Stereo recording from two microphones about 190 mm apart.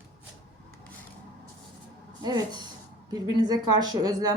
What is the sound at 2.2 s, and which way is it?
Speech, 20° right (ahead or behind).